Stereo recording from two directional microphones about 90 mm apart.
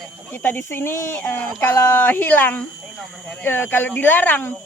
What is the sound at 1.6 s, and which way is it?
Speech, 25° left (ahead or behind).